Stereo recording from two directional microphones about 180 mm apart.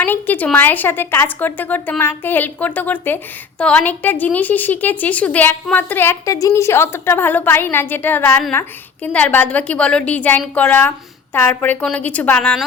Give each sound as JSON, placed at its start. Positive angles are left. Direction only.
{"t": 0.0, "sound": "a woman's voice", "side_deg": 10}